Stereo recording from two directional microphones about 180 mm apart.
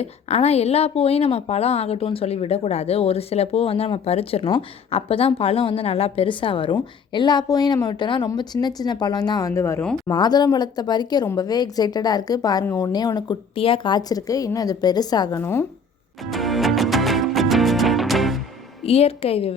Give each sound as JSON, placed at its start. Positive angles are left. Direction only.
{"t": 0.0, "sound": "a woman's voice", "side_deg": 35}
{"t": 16.3, "sound": "music", "side_deg": 0}
{"t": 18.9, "sound": "a woman's voice", "side_deg": 35}